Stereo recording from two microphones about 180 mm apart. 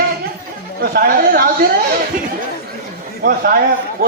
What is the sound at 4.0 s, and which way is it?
Speech, 55° right (ahead or behind).